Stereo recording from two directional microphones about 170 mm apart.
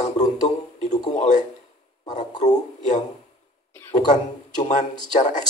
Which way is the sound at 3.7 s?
10° left (ahead or behind).